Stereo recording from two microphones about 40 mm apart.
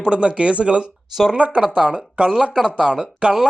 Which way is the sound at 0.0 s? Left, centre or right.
Right.